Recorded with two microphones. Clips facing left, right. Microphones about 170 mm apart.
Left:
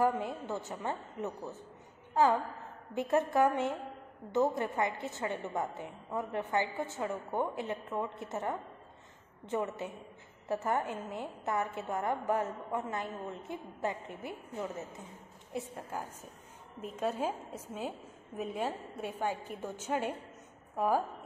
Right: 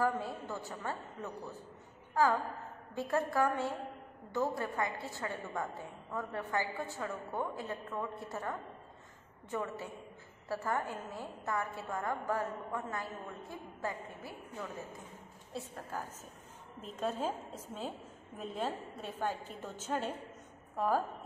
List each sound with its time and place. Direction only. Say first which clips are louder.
0.0 s a woman's voice: left 3 dB; 20° left (ahead or behind)